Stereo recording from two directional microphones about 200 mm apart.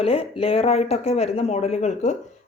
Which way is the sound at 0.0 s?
30° left (ahead or behind).